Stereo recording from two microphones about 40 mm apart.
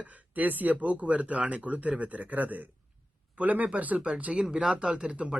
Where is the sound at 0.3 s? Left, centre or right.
Right.